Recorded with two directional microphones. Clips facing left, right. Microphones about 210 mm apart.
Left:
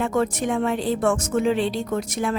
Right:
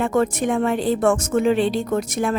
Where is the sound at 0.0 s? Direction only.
50° right (ahead or behind).